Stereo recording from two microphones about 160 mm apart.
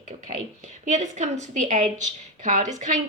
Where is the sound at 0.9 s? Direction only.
45° right (ahead or behind).